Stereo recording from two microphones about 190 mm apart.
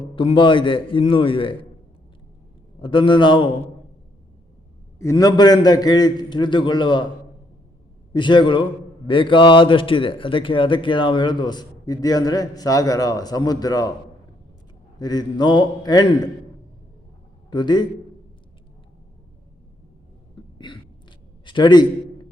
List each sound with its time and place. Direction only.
0.2 s a man's voice: 25° left (ahead or behind)
2.8 s a man's voice: 25° left (ahead or behind)
4.9 s a man's voice: 15° left (ahead or behind)
8.1 s a man's voice: 25° left (ahead or behind)
14.9 s a man's voice: 20° left (ahead or behind)
17.5 s a man's voice: 25° left (ahead or behind)
20.6 s a man's voice: 25° left (ahead or behind)
21.4 s a sound: 25° left (ahead or behind)